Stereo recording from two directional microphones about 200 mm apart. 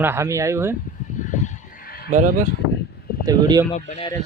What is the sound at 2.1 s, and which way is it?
Speech, 40° right (ahead or behind).